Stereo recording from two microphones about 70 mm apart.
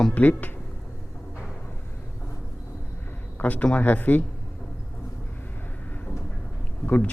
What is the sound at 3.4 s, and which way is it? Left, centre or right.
Speech, left.